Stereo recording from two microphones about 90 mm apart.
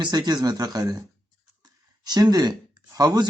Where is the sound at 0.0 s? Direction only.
55° right (ahead or behind).